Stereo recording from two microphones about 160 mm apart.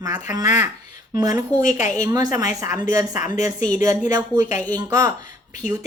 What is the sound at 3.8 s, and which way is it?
Speech, 20° right (ahead or behind).